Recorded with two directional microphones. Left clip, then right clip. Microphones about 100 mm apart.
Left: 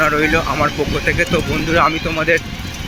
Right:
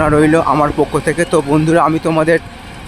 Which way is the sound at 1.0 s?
80° right.